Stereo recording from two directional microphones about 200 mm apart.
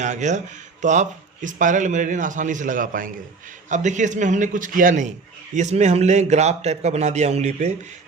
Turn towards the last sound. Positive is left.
turn(degrees=-35)  # may be behind; listen again after turning